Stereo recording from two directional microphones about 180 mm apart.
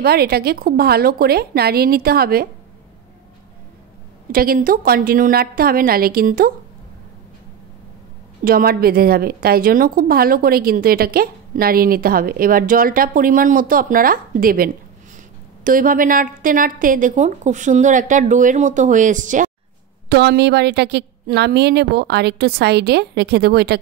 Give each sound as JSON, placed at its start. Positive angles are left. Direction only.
{"t": 0.0, "sound": "a woman's voice", "side_deg": -60}
{"t": 4.3, "sound": "a woman's voice", "side_deg": -55}
{"t": 8.5, "sound": "a woman's voice", "side_deg": -55}
{"t": 20.1, "sound": "a woman's voice", "side_deg": -65}